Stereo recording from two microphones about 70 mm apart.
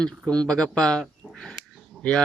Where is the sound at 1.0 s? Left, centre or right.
Centre.